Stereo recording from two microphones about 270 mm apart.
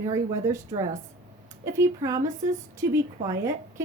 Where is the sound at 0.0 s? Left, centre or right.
Centre.